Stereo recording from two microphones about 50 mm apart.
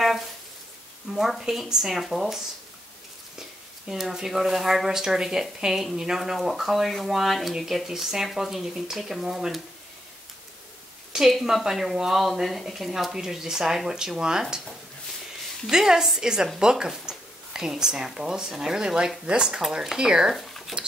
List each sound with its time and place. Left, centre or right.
1.1 s speech: centre
3.9 s speech: centre
11.5 s speech: centre
15.7 s speech: centre
20.3 s a sound: centre